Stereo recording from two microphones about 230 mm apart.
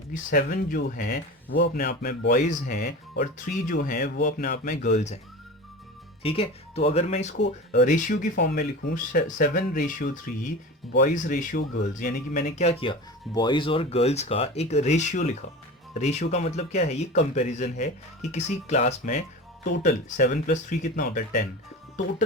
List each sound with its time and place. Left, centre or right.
0.1 s speech: left
6.2 s speech: left
7.3 s speech: left
7.8 s speech: left